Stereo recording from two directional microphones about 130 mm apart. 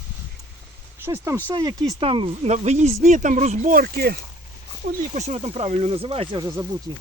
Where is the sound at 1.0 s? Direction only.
20° right (ahead or behind).